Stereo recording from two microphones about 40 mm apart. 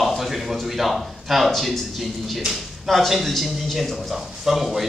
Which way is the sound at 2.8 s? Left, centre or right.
Centre.